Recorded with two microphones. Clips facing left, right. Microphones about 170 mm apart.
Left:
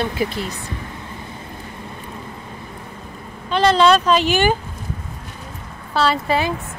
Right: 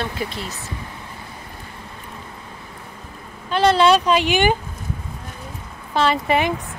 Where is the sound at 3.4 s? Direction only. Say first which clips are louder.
Left 1 dB; 10° right (ahead or behind).